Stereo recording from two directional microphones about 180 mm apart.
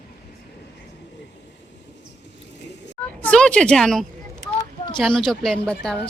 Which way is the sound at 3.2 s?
5° left (ahead or behind).